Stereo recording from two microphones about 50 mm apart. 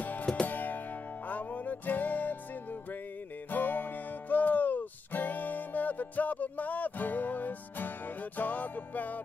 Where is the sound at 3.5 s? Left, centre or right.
Left.